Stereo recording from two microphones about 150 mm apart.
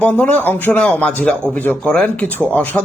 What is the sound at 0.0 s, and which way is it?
A man's voice, 10° left (ahead or behind).